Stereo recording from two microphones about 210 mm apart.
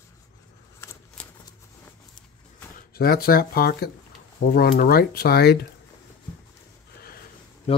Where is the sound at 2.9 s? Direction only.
45° left (ahead or behind).